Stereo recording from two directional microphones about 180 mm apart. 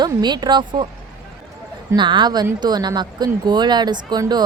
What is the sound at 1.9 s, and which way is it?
Speech, 25° right (ahead or behind).